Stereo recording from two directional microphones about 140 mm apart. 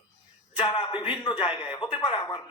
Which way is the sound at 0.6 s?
35° left (ahead or behind).